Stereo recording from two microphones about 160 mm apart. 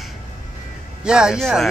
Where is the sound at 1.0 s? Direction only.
5° right (ahead or behind).